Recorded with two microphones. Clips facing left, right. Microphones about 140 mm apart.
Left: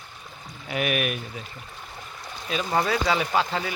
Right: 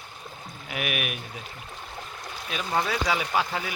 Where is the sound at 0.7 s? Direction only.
5° right (ahead or behind).